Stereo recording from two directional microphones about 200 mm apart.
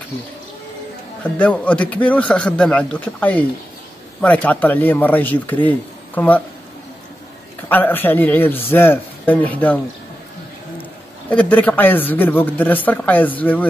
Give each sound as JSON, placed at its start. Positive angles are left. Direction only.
{"t": 1.4, "sound": "a man's voice", "side_deg": 5}
{"t": 7.6, "sound": "a man's voice", "side_deg": 10}
{"t": 11.2, "sound": "a man's voice", "side_deg": 5}